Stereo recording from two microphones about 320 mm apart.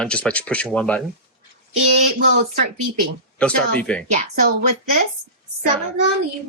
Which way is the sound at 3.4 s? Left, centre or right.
Centre.